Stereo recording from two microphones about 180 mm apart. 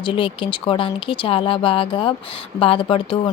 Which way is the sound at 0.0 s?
30° left (ahead or behind).